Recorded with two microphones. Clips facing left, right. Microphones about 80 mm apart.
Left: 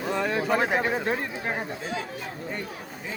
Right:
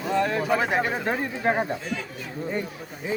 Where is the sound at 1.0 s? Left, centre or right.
Centre.